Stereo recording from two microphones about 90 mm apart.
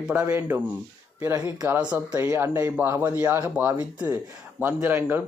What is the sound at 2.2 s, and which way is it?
Speech, 30° right (ahead or behind).